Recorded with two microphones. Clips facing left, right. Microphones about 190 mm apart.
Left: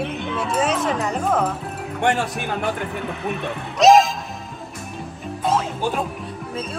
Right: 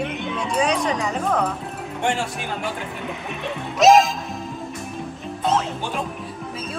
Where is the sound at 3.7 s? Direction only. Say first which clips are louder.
Left 1 dB; centre (ahead or behind).